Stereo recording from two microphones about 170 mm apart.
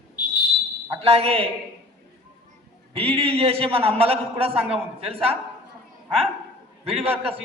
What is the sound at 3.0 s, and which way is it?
A man's voice, 35° right (ahead or behind).